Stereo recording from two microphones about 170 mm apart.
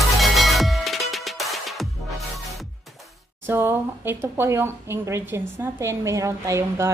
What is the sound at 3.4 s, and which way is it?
A woman's voice, 15° right (ahead or behind).